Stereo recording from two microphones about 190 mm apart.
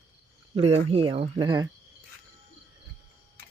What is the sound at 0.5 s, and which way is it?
Speech, 30° right (ahead or behind).